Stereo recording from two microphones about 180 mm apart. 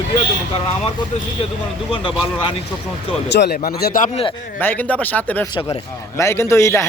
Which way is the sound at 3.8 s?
50° left (ahead or behind).